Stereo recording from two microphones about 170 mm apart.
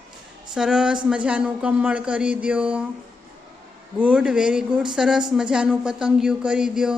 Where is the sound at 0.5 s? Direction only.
5° right (ahead or behind).